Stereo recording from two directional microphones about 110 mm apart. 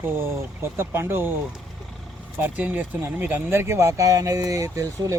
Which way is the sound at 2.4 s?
15° right (ahead or behind).